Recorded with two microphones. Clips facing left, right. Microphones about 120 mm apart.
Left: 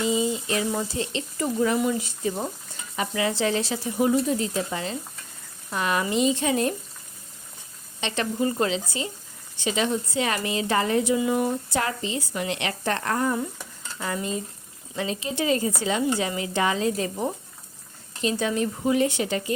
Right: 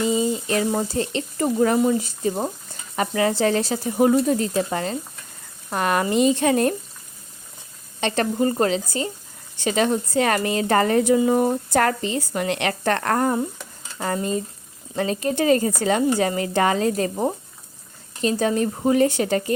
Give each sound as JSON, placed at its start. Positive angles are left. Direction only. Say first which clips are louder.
{"t": 0.0, "sound": "a sound", "louder": "right 3 dB", "side_deg": -45}
{"t": 0.8, "sound": "speech", "louder": "right 4 dB", "side_deg": -45}
{"t": 8.0, "sound": "speech", "louder": "right 5 dB", "side_deg": -45}
{"t": 14.0, "sound": "speech", "louder": "right 5 dB", "side_deg": -45}